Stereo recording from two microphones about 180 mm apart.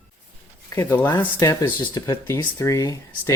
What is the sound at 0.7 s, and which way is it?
Speech, 15° left (ahead or behind).